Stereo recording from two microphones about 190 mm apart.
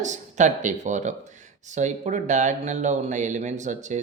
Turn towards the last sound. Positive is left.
turn(degrees=-40)  # may be behind; listen again after turning